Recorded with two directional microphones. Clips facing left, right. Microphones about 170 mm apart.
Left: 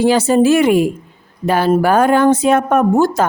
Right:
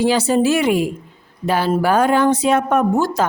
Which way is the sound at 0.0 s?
50° left (ahead or behind).